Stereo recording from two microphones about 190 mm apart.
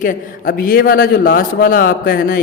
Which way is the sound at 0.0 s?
45° left (ahead or behind).